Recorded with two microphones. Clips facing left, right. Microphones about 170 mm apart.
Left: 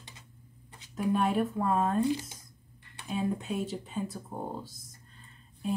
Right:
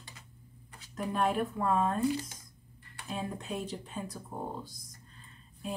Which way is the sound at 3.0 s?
5° left (ahead or behind).